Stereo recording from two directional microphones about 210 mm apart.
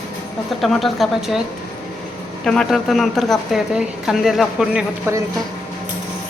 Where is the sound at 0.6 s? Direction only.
Centre (ahead or behind).